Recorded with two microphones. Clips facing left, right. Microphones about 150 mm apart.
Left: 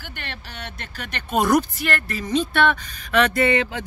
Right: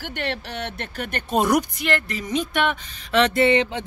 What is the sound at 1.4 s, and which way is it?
Speech, 20° right (ahead or behind).